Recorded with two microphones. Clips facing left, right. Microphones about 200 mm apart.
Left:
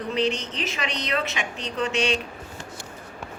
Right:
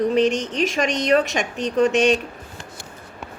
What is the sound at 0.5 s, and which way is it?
A woman's voice, 45° right (ahead or behind).